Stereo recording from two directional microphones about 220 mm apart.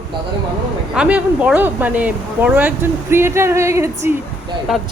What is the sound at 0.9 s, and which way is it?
Speech, 5° right (ahead or behind).